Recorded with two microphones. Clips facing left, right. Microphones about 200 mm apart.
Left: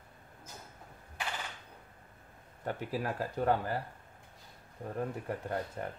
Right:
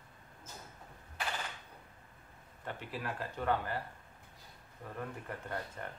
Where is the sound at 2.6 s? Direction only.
40° left (ahead or behind).